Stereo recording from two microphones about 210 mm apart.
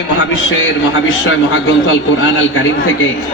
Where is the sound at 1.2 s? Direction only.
65° left (ahead or behind).